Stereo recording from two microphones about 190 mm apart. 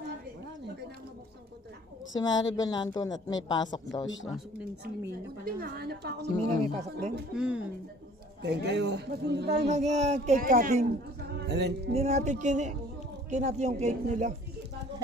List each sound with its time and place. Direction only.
2.1 s speech: 20° left (ahead or behind)
4.3 s a woman's voice: 5° right (ahead or behind)
5.4 s speech: 55° right (ahead or behind)
7.3 s speech: 5° right (ahead or behind)
8.4 s speech: 60° right (ahead or behind)
9.7 s speech: 35° right (ahead or behind)
11.4 s speech: 60° right (ahead or behind)
11.9 s speech: 35° right (ahead or behind)